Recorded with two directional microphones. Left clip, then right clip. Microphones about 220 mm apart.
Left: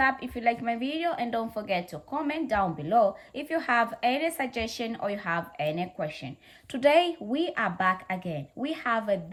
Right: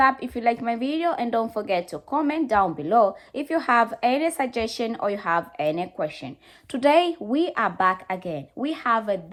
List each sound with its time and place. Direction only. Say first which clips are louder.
0.0 s a woman's voice: right 5 dB; 15° right (ahead or behind)